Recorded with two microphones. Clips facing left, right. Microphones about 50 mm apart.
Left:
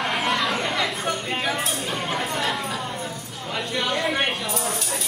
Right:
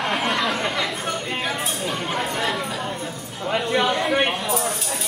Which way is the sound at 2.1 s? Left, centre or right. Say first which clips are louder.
Right 1 dB; centre.